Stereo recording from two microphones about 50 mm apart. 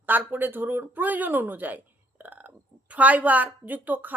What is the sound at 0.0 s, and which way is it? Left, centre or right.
A woman's voice, right.